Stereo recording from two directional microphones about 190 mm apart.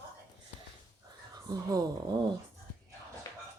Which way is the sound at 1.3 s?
20° right (ahead or behind).